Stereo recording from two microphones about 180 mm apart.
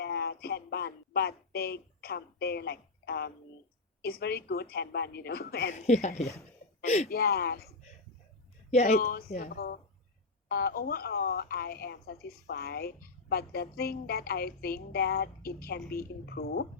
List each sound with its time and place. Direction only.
0.0 s a sound: 60° left (ahead or behind)
4.0 s speech: 55° left (ahead or behind)
5.7 s speech: 40° left (ahead or behind)
7.1 s speech: 60° left (ahead or behind)
8.7 s speech: 35° left (ahead or behind)
9.0 s speech: 55° left (ahead or behind)